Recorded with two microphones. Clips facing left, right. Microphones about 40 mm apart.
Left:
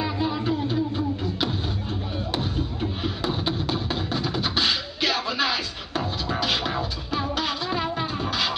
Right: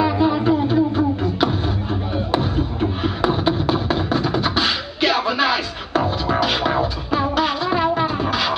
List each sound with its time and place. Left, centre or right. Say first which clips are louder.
0.0 s a sound: right 9 dB; centre
0.9 s beatboxing: right 7 dB; centre
2.1 s music: right 8 dB; centre